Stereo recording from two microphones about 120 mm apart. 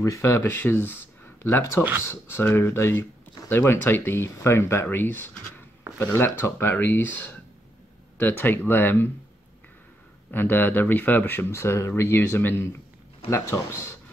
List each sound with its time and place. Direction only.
0.0 s speech: 25° left (ahead or behind)
10.3 s speech: 15° left (ahead or behind)